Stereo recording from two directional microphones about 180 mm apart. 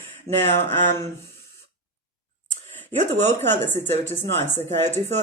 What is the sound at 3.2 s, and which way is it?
Speech, 10° left (ahead or behind).